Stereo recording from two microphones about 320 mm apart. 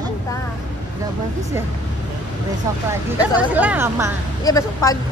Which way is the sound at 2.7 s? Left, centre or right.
Centre.